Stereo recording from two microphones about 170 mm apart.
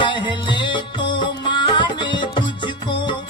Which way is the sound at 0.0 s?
25° left (ahead or behind).